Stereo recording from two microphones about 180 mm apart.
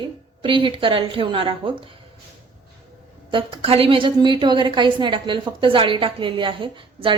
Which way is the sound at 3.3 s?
30° right (ahead or behind).